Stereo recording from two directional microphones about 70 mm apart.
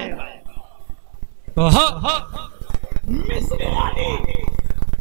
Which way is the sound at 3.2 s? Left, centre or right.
Right.